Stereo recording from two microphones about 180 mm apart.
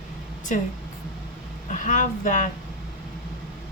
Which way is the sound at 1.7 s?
45° left (ahead or behind).